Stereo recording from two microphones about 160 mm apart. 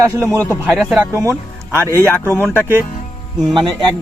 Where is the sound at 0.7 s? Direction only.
5° right (ahead or behind).